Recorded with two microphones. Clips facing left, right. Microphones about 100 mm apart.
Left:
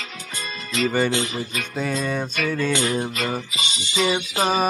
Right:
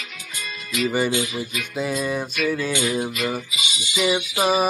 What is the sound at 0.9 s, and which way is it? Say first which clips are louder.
Music: even; 10° right (ahead or behind).